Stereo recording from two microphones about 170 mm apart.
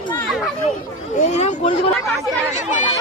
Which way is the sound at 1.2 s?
40° left (ahead or behind).